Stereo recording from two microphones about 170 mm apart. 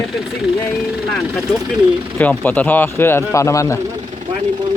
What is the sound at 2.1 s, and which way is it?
Speech, 10° left (ahead or behind).